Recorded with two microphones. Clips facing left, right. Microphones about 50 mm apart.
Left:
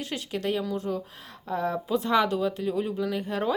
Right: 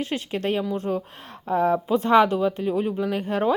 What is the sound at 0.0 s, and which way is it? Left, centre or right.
Speech, right.